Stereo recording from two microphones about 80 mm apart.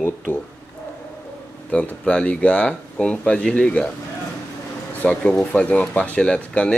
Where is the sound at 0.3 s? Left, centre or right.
Left.